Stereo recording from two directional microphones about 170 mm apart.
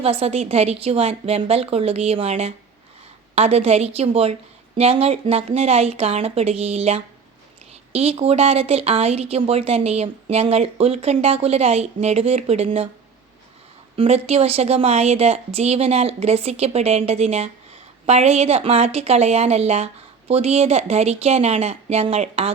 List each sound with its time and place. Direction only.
0.0 s a woman's voice: 35° right (ahead or behind)
13.9 s a woman's voice: 35° right (ahead or behind)